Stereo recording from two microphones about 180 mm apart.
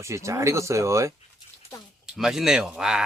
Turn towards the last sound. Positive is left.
turn(degrees=-5)  # may be behind; listen again after turning